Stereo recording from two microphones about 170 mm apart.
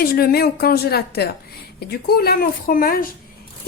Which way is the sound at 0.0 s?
60° left (ahead or behind).